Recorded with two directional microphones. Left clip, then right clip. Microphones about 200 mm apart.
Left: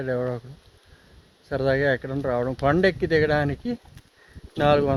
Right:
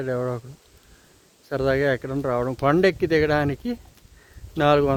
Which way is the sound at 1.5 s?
10° right (ahead or behind).